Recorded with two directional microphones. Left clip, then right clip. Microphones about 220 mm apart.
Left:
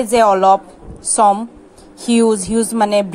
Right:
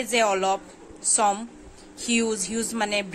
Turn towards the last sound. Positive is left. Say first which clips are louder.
# left 12 dB
turn(degrees=20)  # may be behind; listen again after turning